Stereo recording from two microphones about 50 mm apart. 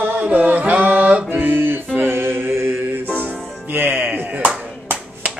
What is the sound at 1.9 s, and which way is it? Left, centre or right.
Music, right.